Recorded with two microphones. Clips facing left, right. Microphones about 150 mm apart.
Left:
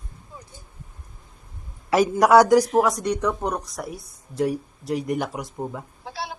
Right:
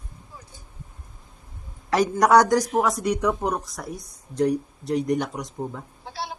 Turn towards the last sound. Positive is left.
turn(degrees=0)  # may be behind; listen again after turning